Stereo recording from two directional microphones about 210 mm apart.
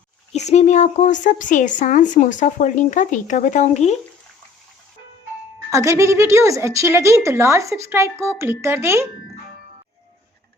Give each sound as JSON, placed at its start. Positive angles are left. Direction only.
{"t": 0.3, "sound": "speech", "side_deg": 35}
{"t": 5.7, "sound": "speech", "side_deg": -15}